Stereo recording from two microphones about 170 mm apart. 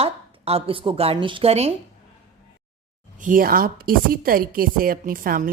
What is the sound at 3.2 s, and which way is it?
A woman's voice, 55° right (ahead or behind).